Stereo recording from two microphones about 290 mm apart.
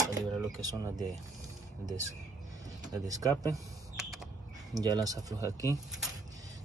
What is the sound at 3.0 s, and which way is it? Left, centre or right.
Speech, centre.